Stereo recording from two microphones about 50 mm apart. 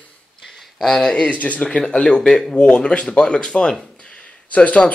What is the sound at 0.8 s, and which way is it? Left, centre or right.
Speech, centre.